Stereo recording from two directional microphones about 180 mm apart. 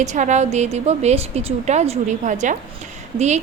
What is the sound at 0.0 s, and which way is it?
A woman's voice, 40° right (ahead or behind).